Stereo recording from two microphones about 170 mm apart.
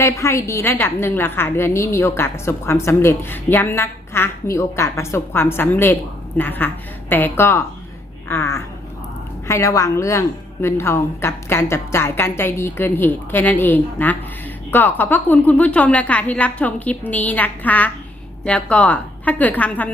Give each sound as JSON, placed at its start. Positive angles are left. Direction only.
{"t": 0.0, "sound": "a woman's voice", "side_deg": 15}